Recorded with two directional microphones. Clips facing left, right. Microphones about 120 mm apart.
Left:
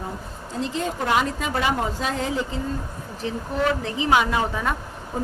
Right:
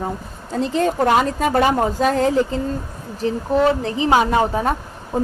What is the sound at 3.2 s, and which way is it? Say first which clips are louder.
A woman's voice: right 7 dB; 35° right (ahead or behind).